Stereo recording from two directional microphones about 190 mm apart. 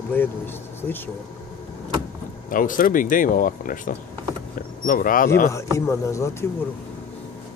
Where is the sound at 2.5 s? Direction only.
45° left (ahead or behind).